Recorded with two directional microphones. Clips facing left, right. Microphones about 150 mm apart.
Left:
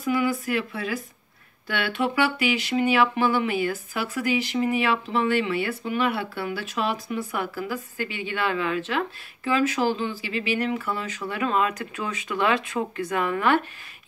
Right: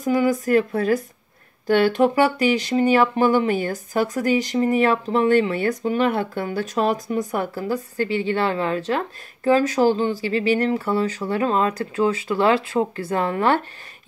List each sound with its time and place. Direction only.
0.0 s speech: 45° right (ahead or behind)